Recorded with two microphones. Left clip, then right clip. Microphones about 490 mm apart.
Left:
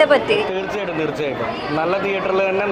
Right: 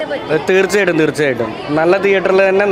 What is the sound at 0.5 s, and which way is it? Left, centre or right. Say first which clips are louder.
A man's voice: right 11 dB; right.